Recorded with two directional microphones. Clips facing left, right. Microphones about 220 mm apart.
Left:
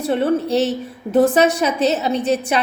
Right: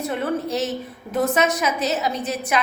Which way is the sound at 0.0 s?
30° left (ahead or behind).